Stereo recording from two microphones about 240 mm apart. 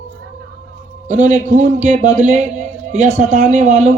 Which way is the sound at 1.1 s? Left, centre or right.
Right.